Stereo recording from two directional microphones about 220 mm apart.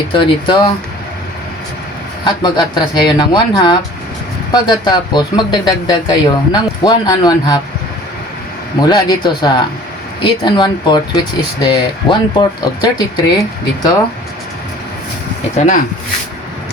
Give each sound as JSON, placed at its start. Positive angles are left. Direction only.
{"t": 0.1, "sound": "speech", "side_deg": 20}
{"t": 2.2, "sound": "speech", "side_deg": 20}
{"t": 8.8, "sound": "speech", "side_deg": 20}
{"t": 15.5, "sound": "speech", "side_deg": 35}